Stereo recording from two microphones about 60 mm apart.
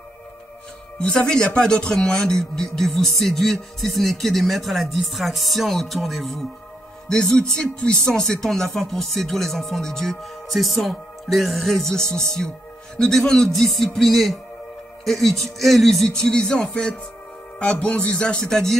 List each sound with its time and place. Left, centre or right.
0.9 s a man's voice: centre
7.1 s a man's voice: centre
17.6 s music: centre